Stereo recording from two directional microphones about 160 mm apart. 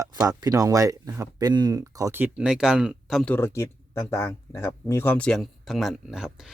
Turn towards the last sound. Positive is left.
turn(degrees=-5)  # may be behind; listen again after turning